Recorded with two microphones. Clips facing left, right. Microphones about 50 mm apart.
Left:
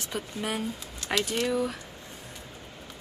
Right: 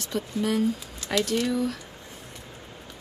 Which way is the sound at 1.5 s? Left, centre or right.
Centre.